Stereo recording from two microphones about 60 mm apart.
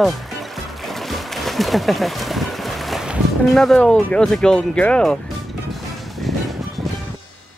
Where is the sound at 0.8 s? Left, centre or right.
Centre.